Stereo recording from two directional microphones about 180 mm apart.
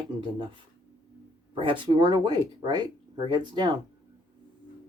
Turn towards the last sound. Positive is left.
turn(degrees=-25)  # may be behind; listen again after turning